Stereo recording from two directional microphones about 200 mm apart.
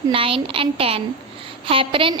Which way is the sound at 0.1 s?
25° right (ahead or behind).